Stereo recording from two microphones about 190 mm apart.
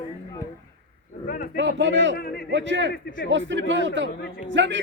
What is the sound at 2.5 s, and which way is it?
Speech, 70° right (ahead or behind).